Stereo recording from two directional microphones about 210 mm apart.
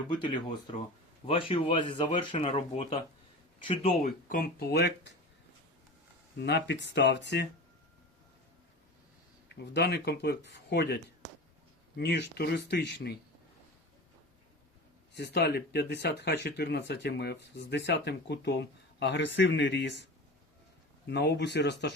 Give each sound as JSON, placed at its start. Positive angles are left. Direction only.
{"t": 1.3, "sound": "speech", "side_deg": 25}
{"t": 4.0, "sound": "speech", "side_deg": 40}
{"t": 6.4, "sound": "speech", "side_deg": 55}
{"t": 9.7, "sound": "speech", "side_deg": 50}
{"t": 15.1, "sound": "speech", "side_deg": 55}
{"t": 21.1, "sound": "speech", "side_deg": 55}